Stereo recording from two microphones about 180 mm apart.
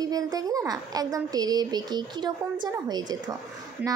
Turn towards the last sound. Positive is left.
turn(degrees=-10)  # may be behind; listen again after turning